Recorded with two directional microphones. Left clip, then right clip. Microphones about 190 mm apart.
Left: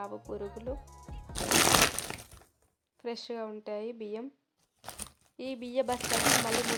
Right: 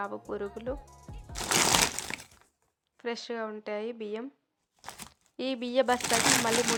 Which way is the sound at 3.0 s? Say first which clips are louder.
Right 3 dB; 5° right (ahead or behind).